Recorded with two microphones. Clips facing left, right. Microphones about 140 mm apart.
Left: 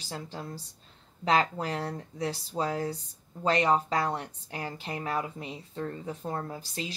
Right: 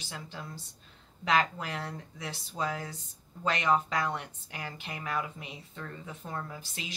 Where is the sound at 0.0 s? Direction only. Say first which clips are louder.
Left 4 dB; 35° left (ahead or behind).